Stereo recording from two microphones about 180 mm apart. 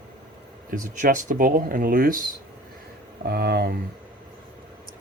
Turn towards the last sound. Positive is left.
turn(degrees=-60)  # may be behind; listen again after turning